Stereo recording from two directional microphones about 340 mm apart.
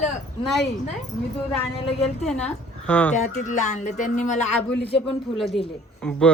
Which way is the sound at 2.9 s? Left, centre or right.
Centre.